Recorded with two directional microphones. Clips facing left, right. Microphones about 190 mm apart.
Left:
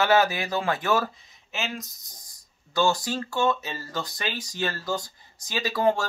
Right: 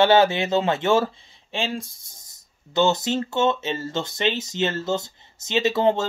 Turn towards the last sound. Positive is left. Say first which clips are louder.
# right 4 dB
turn(degrees=-25)  # may be behind; listen again after turning